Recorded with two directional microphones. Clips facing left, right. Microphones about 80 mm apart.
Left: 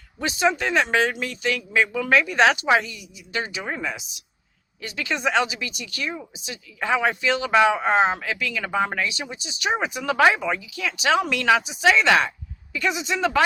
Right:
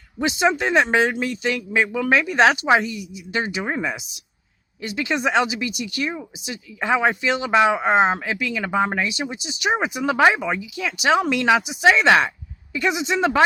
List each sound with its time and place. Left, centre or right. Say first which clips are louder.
0.2 s speech: right 2 dB; right
11.9 s speech: right 2 dB; right